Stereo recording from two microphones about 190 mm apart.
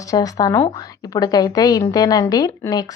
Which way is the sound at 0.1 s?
20° left (ahead or behind).